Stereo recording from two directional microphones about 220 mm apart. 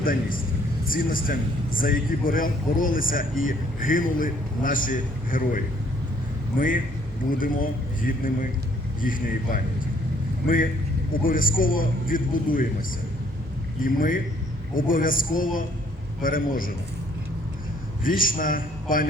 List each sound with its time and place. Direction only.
0.0 s a man's voice: 40° left (ahead or behind)
13.8 s a man's voice: 40° left (ahead or behind)
18.0 s a man's voice: 40° left (ahead or behind)